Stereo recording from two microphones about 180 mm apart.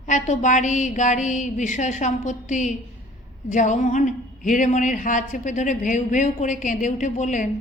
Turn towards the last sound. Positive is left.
turn(degrees=40)  # may be behind; listen again after turning